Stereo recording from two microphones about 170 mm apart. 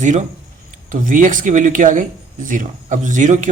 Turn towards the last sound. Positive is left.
turn(degrees=-45)  # may be behind; listen again after turning